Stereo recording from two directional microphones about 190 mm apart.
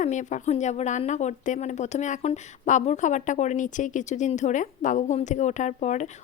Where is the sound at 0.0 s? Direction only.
40° left (ahead or behind).